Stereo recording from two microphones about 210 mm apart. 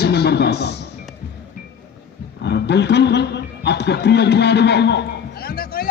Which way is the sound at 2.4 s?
55° left (ahead or behind).